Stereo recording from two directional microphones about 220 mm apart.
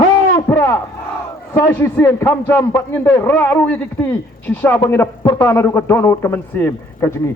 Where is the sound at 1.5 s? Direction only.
10° left (ahead or behind).